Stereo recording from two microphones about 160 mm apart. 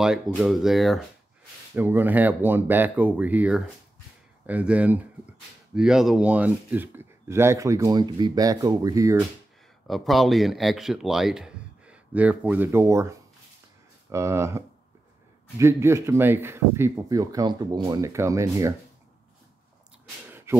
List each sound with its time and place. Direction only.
0.4 s speech: centre (ahead or behind)
1.8 s speech: 10° right (ahead or behind)
9.8 s speech: centre (ahead or behind); by 13.1 s 15° right (ahead or behind)
14.1 s speech: 15° right (ahead or behind)
20.2 s a sound: 15° right (ahead or behind)